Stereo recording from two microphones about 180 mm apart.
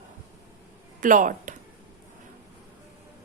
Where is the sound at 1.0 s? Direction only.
45° right (ahead or behind).